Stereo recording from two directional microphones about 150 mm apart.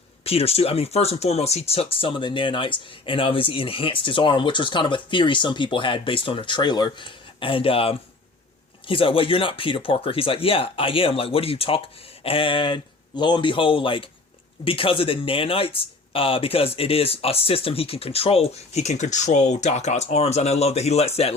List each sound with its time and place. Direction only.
0.3 s speech: 40° left (ahead or behind)